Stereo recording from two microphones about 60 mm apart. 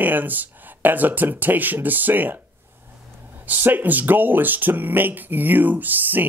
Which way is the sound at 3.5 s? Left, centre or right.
Right.